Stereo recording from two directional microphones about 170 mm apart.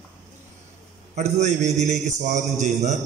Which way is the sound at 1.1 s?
40° right (ahead or behind).